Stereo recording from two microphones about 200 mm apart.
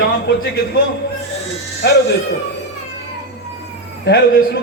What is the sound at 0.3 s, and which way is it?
Speech, 50° left (ahead or behind).